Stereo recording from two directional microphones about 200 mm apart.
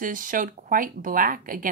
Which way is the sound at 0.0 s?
40° right (ahead or behind).